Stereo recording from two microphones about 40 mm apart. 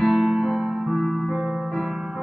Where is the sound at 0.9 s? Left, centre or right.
Centre.